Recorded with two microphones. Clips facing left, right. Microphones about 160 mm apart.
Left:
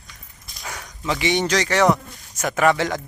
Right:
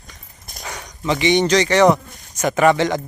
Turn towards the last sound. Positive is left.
turn(degrees=0)  # may be behind; listen again after turning